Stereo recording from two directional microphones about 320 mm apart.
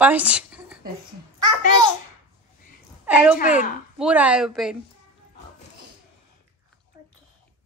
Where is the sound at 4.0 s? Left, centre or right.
Centre.